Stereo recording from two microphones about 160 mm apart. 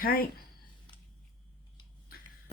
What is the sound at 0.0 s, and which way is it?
Speech, 70° left (ahead or behind).